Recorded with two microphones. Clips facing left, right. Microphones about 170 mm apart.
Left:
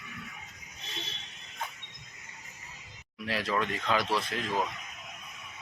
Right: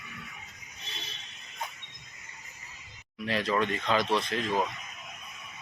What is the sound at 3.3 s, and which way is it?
Speech, 5° left (ahead or behind).